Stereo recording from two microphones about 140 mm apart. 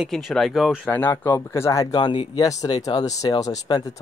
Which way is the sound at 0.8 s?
15° left (ahead or behind).